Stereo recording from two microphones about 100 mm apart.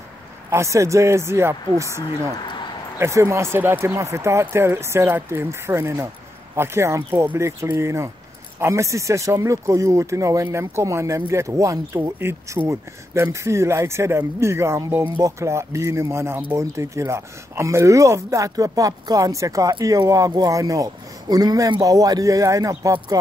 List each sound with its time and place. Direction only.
0.5 s speech: 30° right (ahead or behind)
3.0 s speech: 30° right (ahead or behind)